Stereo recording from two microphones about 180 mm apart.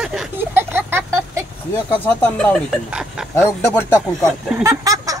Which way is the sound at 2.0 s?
10° left (ahead or behind).